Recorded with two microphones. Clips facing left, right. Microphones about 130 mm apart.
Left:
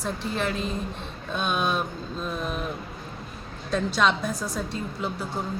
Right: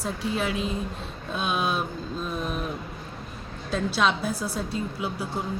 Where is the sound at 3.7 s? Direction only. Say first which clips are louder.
Left 1 dB; 5° right (ahead or behind).